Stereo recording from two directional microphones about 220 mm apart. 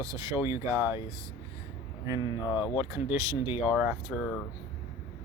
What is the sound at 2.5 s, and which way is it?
Speech, 20° left (ahead or behind).